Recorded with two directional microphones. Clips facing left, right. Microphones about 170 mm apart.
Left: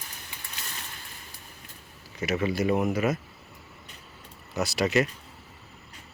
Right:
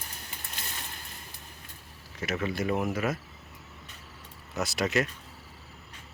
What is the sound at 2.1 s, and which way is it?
Speech, centre (ahead or behind).